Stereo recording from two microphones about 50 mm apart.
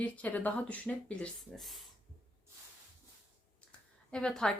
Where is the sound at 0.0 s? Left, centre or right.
Left.